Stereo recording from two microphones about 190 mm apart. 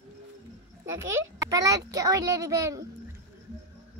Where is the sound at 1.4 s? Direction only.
20° right (ahead or behind).